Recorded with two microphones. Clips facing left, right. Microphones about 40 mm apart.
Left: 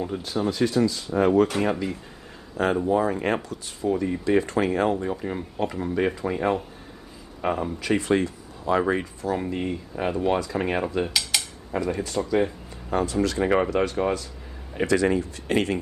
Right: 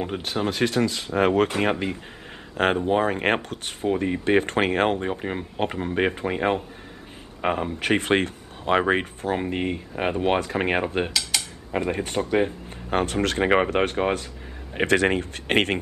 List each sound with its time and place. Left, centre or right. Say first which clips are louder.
0.0 s speech: even; right
1.6 s speech: right 1 dB; right